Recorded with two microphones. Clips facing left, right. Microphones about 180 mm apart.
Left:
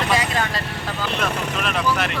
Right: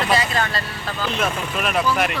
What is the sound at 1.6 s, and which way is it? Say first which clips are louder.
Speech: right 3 dB; 10° right (ahead or behind).